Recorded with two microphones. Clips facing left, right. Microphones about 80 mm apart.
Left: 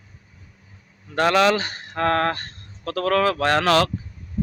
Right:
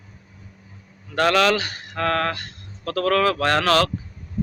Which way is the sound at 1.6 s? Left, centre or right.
Left.